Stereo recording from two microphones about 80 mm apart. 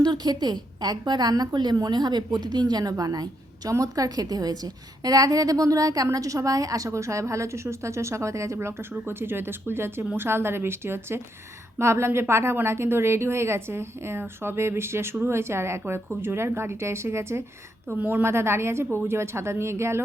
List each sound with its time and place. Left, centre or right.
0.0 s a woman's voice: right
8.5 s a woman's voice: right
17.8 s a woman's voice: right